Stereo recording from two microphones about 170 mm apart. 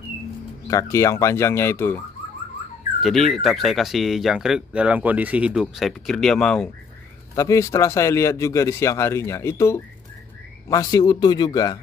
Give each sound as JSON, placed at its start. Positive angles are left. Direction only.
{"t": 0.7, "sound": "speech", "side_deg": 20}
{"t": 3.0, "sound": "speech", "side_deg": 0}
{"t": 7.3, "sound": "speech", "side_deg": 20}